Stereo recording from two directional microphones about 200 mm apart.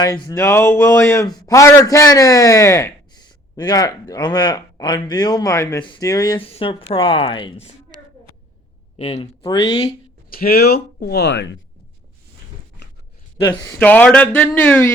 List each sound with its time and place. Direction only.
0.0 s a man's voice: 20° left (ahead or behind)
9.0 s speech: 35° left (ahead or behind)
10.2 s speech: 50° left (ahead or behind)
13.4 s a man's voice: 20° left (ahead or behind)
13.7 s a man's voice: 10° left (ahead or behind)